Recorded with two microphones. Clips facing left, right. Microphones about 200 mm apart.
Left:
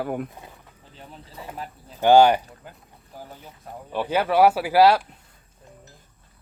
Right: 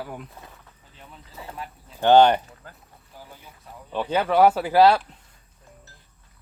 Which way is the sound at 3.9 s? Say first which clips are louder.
Even; 10° left (ahead or behind).